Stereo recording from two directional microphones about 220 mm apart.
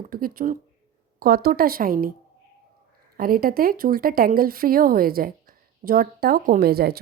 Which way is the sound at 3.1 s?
40° right (ahead or behind).